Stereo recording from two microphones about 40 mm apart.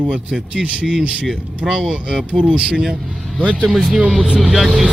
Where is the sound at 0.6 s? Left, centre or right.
Right.